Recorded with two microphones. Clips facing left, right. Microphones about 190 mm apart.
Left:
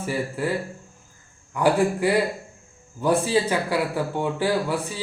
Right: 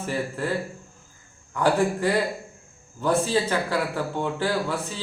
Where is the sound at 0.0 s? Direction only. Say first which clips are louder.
Left 2 dB; 10° left (ahead or behind).